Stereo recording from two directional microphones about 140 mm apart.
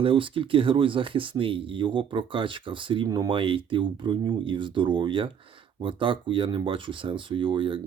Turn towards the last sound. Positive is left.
turn(degrees=-40)  # may be behind; listen again after turning